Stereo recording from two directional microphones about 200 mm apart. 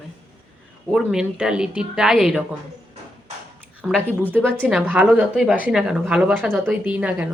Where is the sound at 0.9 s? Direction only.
5° right (ahead or behind).